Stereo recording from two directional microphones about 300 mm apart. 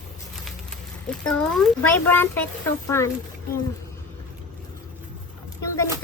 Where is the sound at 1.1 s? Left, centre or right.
Centre.